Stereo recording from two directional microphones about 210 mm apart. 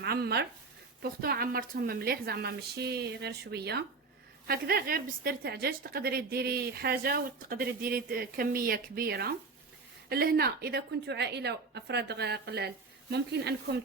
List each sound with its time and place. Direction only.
0.0 s a woman's voice: 50° right (ahead or behind)